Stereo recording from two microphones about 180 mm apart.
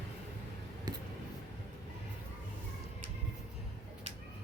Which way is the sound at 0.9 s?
20° right (ahead or behind).